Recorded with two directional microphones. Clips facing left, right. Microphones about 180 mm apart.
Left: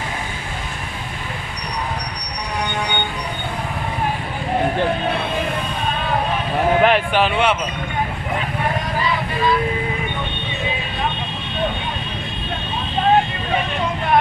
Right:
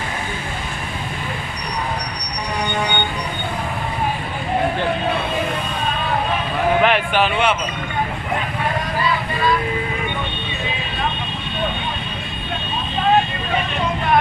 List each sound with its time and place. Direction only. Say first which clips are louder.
6.8 s speech: left 1 dB; 35° left (ahead or behind)